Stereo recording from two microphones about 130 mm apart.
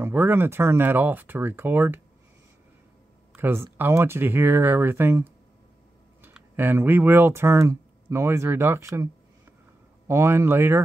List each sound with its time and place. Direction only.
0.0 s speech: 15° right (ahead or behind)
3.3 s speech: 15° right (ahead or behind)